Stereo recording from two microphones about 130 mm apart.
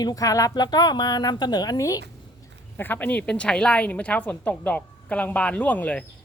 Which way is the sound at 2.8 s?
15° left (ahead or behind).